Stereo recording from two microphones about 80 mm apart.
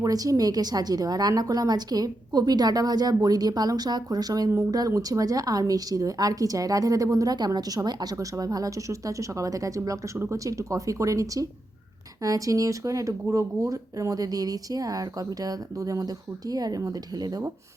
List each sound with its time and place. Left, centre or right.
0.0 s a woman's voice: right